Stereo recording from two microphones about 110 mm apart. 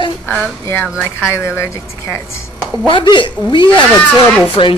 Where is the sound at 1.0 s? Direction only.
25° left (ahead or behind).